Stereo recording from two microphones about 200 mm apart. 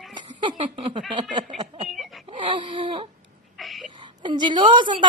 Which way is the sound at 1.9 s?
Centre (ahead or behind).